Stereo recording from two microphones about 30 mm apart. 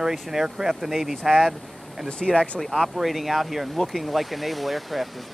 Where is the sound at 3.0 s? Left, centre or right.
Centre.